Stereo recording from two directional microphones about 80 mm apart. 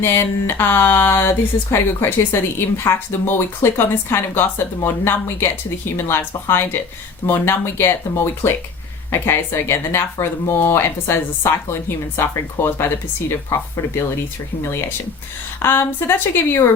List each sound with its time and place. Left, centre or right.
0.0 s a woman's voice: left